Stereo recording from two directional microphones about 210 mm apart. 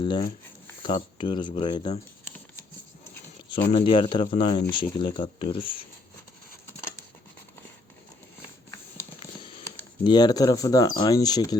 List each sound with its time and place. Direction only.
0.0 s speech: 25° left (ahead or behind)
2.2 s a sound: 10° left (ahead or behind)
3.7 s speech: 25° left (ahead or behind)
10.0 s speech: 20° left (ahead or behind)